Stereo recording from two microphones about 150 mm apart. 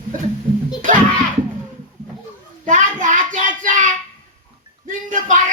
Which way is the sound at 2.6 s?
55° right (ahead or behind).